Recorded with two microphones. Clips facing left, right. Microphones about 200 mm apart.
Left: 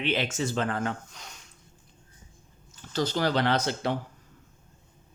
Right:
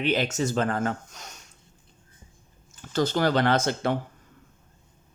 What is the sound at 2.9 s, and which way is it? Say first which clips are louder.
Speech: right 3 dB; 50° right (ahead or behind).